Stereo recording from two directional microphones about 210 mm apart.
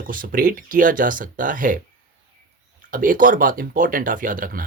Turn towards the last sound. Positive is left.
turn(degrees=-40)  # may be behind; listen again after turning